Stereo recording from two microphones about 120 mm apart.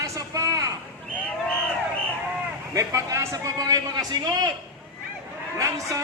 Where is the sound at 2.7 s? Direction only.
25° right (ahead or behind).